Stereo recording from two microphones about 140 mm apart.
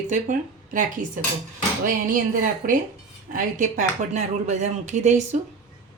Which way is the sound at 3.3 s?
70° right (ahead or behind).